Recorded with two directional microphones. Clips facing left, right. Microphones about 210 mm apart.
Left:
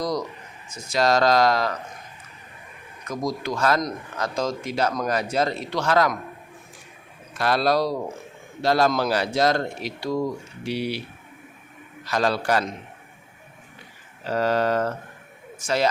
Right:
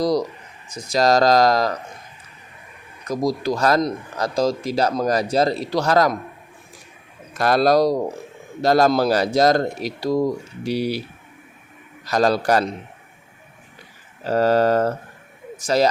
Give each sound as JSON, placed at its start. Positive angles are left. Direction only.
{"t": 0.0, "sound": "a sound", "side_deg": -35}
{"t": 0.7, "sound": "speech", "side_deg": -35}
{"t": 3.1, "sound": "speech", "side_deg": -35}
{"t": 7.3, "sound": "speech", "side_deg": -45}
{"t": 12.0, "sound": "speech", "side_deg": -40}
{"t": 14.3, "sound": "speech", "side_deg": -40}